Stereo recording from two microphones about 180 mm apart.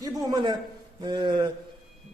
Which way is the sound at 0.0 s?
20° right (ahead or behind).